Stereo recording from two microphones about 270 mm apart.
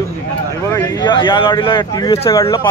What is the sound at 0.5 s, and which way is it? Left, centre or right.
A man's voice, centre.